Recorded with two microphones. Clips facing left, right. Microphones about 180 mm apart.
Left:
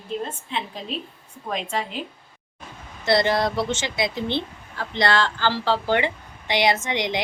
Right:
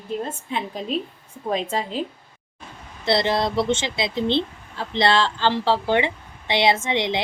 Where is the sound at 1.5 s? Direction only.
30° right (ahead or behind).